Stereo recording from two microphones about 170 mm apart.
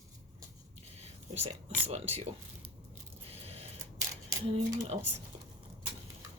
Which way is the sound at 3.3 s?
35° right (ahead or behind).